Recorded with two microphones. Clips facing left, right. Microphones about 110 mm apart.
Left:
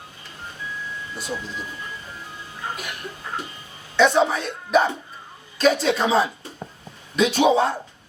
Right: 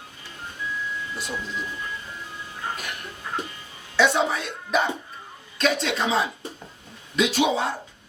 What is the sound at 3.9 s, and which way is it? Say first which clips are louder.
Speech: left 3 dB; centre (ahead or behind).